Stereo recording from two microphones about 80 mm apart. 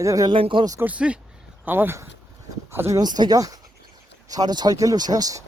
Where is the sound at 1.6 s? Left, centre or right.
Right.